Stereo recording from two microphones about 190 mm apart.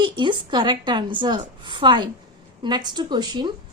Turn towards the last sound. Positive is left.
turn(degrees=-20)  # may be behind; listen again after turning